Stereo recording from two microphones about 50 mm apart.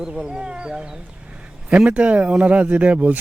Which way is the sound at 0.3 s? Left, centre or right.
Centre.